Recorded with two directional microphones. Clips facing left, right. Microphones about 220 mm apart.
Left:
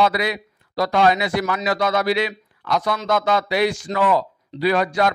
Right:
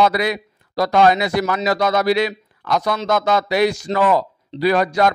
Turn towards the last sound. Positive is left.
turn(degrees=-40)  # may be behind; listen again after turning